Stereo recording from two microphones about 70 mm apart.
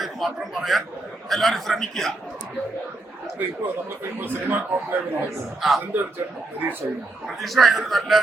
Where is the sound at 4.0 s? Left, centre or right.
Right.